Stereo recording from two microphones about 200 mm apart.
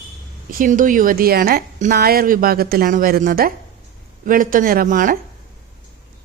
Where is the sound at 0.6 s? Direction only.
40° right (ahead or behind).